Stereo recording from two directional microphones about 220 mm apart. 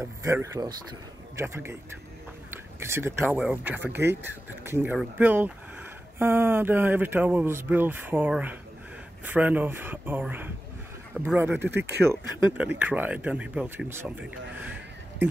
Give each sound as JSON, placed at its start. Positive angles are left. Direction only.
{"t": 0.2, "sound": "speech", "side_deg": -15}
{"t": 2.8, "sound": "speech", "side_deg": -10}
{"t": 11.7, "sound": "speech", "side_deg": -50}
{"t": 12.0, "sound": "speech", "side_deg": -10}